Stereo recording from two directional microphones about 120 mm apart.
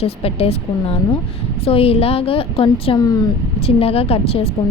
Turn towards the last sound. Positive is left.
turn(degrees=55)  # may be behind; listen again after turning